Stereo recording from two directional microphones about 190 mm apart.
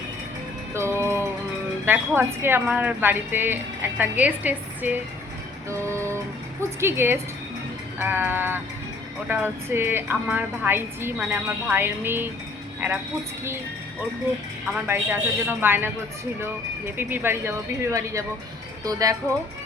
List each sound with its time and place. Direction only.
0.7 s music: 15° right (ahead or behind)
1.8 s speech: 10° right (ahead or behind)
14.7 s speech: 10° right (ahead or behind)